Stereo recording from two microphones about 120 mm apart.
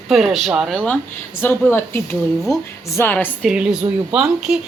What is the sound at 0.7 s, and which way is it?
Speech, 10° left (ahead or behind).